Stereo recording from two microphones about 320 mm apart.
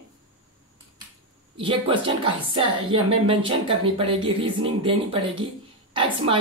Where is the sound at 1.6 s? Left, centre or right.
Centre.